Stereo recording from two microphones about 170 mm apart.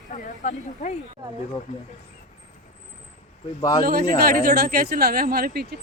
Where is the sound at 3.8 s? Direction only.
60° right (ahead or behind).